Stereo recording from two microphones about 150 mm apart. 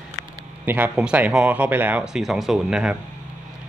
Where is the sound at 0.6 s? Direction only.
10° right (ahead or behind).